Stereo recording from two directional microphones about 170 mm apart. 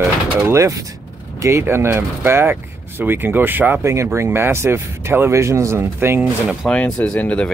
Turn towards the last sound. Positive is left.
turn(degrees=5)  # may be behind; listen again after turning